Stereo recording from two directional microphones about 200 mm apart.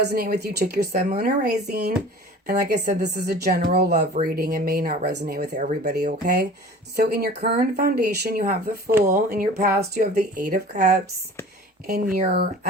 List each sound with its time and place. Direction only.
0.1 s speech: 50° right (ahead or behind)
5.5 s speech: 40° right (ahead or behind)
12.1 s speech: 50° right (ahead or behind)